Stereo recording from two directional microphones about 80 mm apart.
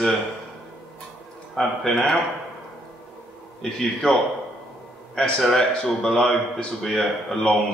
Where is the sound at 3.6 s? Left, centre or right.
Centre.